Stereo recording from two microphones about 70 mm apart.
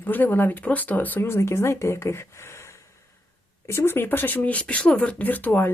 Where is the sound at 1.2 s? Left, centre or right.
Left.